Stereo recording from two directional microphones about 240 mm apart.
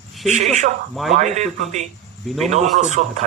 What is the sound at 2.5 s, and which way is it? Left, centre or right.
Speech, right.